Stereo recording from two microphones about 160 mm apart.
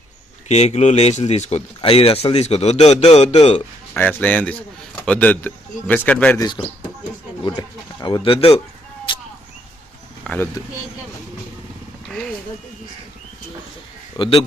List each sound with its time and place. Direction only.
0.4 s speech: 45° left (ahead or behind)
3.9 s speech: 10° left (ahead or behind)
7.4 s speech: 25° left (ahead or behind)
10.2 s speech: 15° left (ahead or behind)
14.2 s a man's voice: 25° left (ahead or behind)